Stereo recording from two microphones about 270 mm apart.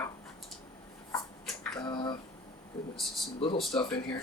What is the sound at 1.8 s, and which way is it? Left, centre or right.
Speech, centre.